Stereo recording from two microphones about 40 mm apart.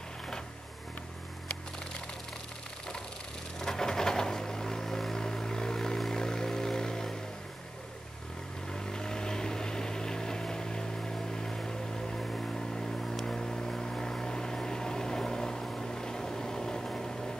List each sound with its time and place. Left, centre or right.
3.5 s a sound: centre
6.1 s vehicle: centre
8.7 s vehicle: centre